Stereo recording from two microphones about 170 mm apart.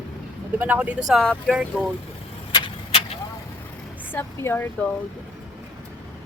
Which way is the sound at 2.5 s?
30° left (ahead or behind).